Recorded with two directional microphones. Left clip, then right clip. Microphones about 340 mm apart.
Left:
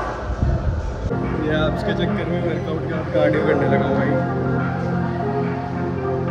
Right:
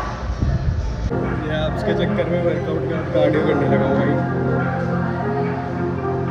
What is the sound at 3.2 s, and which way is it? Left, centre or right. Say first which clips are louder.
Speech: left 1 dB; centre.